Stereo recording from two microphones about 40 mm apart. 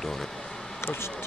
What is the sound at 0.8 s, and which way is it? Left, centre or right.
Speech, left.